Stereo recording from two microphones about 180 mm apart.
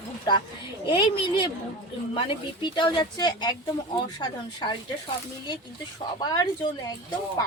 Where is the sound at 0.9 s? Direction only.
25° left (ahead or behind).